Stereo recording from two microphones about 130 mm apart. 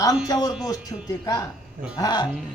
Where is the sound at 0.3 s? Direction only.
30° left (ahead or behind).